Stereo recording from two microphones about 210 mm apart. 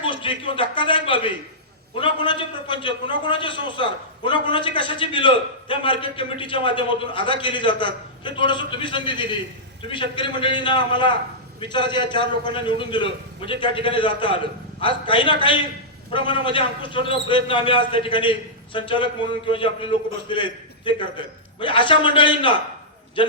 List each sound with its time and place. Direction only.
0.0 s a man's voice: 25° left (ahead or behind)